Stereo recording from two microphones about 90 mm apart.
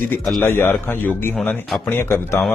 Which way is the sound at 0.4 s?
25° left (ahead or behind).